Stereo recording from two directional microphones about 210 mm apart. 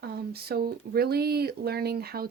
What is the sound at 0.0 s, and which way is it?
Speech, 50° right (ahead or behind).